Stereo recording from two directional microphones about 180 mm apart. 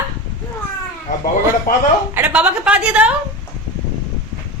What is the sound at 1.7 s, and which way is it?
Speech, 50° left (ahead or behind).